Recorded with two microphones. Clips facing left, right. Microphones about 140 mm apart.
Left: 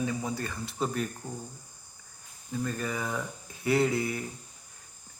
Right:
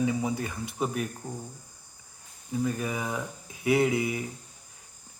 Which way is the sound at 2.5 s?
15° right (ahead or behind).